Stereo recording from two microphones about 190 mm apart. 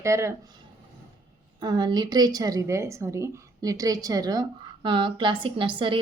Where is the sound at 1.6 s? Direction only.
25° right (ahead or behind).